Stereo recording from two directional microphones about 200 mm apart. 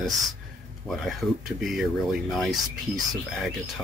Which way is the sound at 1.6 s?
Centre (ahead or behind).